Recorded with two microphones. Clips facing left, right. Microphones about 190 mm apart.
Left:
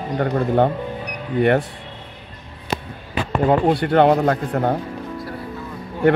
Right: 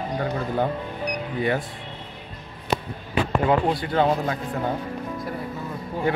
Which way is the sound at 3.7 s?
65° left (ahead or behind).